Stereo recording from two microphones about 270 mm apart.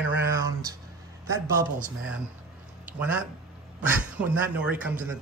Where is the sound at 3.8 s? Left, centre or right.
Centre.